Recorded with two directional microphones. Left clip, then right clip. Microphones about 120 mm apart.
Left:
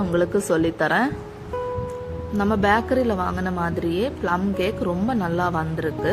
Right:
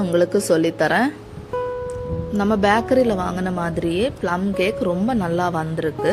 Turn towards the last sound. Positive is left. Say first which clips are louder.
# right 2 dB
turn(degrees=-65)  # may be behind; listen again after turning